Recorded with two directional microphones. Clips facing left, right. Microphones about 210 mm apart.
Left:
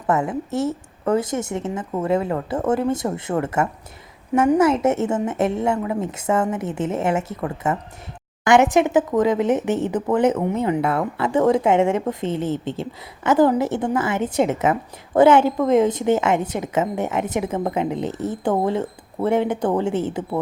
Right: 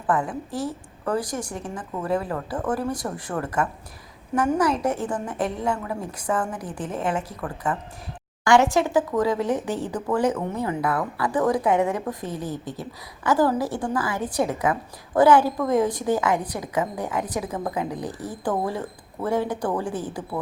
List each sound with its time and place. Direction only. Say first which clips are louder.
0.1 s speech: left 4 dB; 25° left (ahead or behind)